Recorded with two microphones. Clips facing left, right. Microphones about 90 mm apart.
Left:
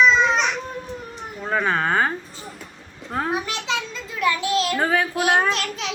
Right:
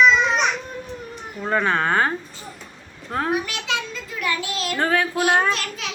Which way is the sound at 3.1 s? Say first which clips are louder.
Right 1 dB; centre (ahead or behind).